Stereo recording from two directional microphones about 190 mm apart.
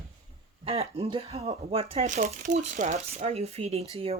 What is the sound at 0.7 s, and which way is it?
Speech, 30° right (ahead or behind).